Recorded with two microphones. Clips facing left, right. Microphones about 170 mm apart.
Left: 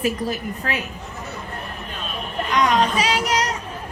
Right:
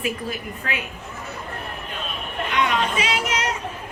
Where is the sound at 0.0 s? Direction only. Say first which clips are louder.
Left 4 dB; 40° left (ahead or behind).